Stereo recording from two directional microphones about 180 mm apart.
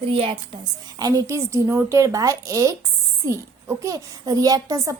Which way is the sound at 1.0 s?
20° right (ahead or behind).